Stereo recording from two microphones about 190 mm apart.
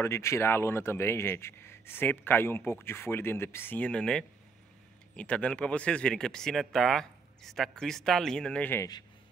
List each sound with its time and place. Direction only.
0.0 s a man's voice: 15° left (ahead or behind)